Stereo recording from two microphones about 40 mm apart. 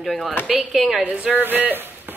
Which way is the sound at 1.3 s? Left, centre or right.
Right.